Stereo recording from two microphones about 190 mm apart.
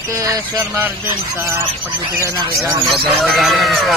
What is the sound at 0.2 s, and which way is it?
Speech, 15° right (ahead or behind).